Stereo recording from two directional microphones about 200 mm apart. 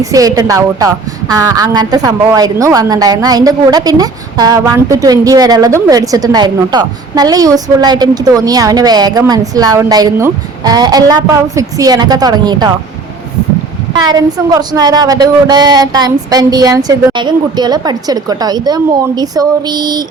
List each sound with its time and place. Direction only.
0.0 s a woman's voice: 15° right (ahead or behind)
13.9 s a woman's voice: 20° right (ahead or behind)